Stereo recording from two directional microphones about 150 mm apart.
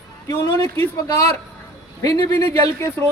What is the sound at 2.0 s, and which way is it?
A man's voice, 25° left (ahead or behind).